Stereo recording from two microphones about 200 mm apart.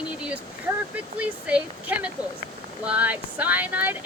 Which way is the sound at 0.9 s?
5° right (ahead or behind).